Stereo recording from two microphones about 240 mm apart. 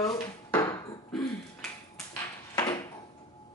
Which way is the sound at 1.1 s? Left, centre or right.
Centre.